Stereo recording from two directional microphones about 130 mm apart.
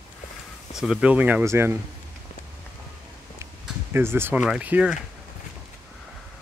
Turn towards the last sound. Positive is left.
turn(degrees=-10)  # may be behind; listen again after turning